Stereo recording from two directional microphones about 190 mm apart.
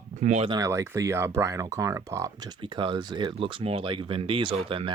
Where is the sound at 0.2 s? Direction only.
35° right (ahead or behind).